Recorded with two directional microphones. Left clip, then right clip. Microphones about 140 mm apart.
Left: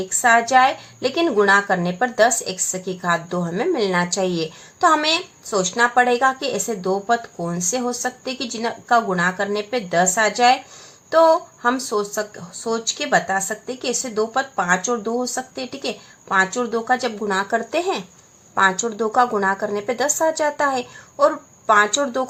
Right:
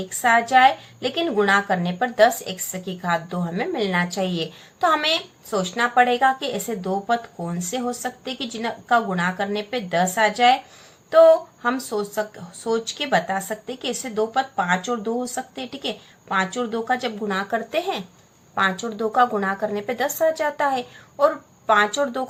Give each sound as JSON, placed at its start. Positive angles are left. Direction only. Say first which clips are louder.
{"t": 0.2, "sound": "a woman's voice", "louder": "left 1 dB", "side_deg": 35}